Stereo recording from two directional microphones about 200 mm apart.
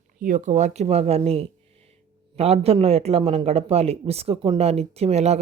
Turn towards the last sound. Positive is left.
turn(degrees=-35)  # may be behind; listen again after turning